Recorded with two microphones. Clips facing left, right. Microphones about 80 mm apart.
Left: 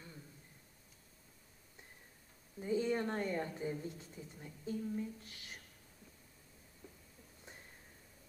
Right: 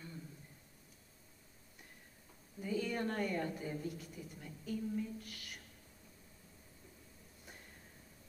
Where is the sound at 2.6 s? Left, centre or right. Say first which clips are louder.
Left 3 dB; left.